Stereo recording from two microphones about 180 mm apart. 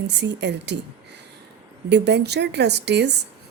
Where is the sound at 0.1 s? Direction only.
75° right (ahead or behind).